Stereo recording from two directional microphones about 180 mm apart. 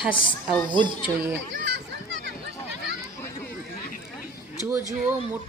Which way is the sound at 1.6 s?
80° right.